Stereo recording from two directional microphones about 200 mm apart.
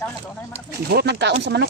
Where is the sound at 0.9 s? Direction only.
55° right (ahead or behind).